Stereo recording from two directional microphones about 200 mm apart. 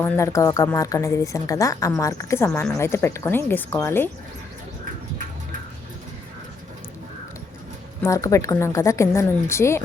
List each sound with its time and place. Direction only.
0.0 s a woman's voice: 15° left (ahead or behind)
8.0 s a woman's voice: 15° left (ahead or behind)